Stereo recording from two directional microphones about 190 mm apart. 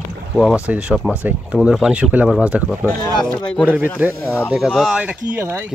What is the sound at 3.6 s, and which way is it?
Speech, 10° right (ahead or behind).